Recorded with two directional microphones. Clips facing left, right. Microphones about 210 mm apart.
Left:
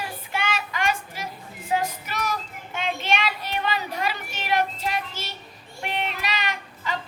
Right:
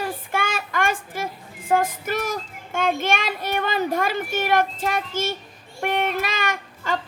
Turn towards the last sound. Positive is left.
turn(degrees=-50)  # may be behind; listen again after turning